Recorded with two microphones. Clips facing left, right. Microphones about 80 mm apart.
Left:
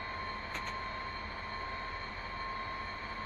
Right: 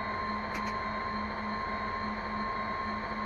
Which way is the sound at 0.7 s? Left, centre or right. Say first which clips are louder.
Right 7 dB; right.